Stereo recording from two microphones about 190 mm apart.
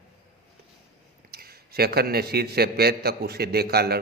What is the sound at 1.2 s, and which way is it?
A man's voice, 55° right (ahead or behind).